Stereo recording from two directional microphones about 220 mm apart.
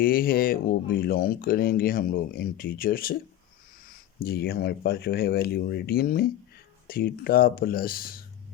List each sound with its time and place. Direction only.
0.0 s speech: 40° left (ahead or behind)